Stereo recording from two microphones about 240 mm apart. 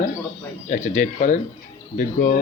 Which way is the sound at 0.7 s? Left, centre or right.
Left.